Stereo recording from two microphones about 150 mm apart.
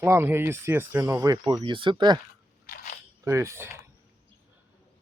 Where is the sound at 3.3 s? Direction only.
20° right (ahead or behind).